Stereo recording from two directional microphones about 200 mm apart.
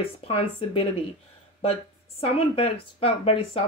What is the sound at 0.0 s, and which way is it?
Speech, 30° left (ahead or behind).